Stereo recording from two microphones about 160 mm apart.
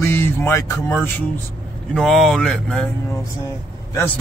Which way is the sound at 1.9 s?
Centre (ahead or behind).